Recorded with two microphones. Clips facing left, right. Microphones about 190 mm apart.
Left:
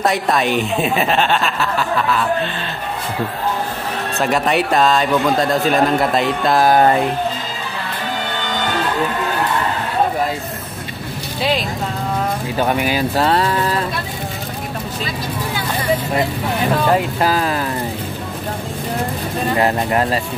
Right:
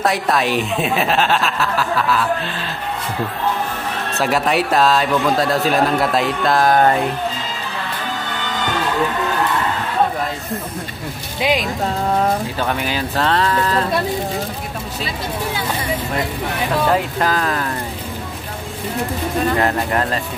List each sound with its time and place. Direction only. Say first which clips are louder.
0.0 s speech: left 1 dB; centre (ahead or behind)
4.2 s speech: left 1 dB; centre (ahead or behind)
12.5 s speech: left 4 dB; 10° left (ahead or behind)
17.2 s speech: left 2 dB; 10° left (ahead or behind)
19.5 s speech: left 2 dB; 15° left (ahead or behind)